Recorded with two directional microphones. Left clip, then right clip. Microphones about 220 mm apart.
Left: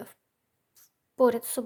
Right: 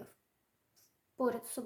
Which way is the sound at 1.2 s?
35° left (ahead or behind).